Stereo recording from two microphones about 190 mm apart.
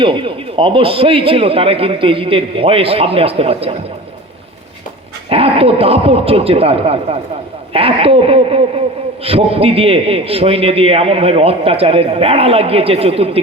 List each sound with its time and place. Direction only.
0.0 s a man's voice: 25° right (ahead or behind)
5.3 s a man's voice: 30° right (ahead or behind)